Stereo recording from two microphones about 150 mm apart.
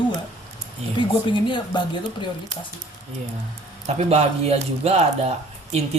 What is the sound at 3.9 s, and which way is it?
Speech, 45° right (ahead or behind).